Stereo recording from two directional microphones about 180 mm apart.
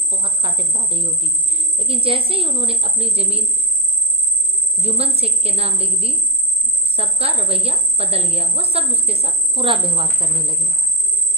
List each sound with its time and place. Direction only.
0.1 s a woman's voice: 30° right (ahead or behind)
4.8 s a woman's voice: 35° right (ahead or behind)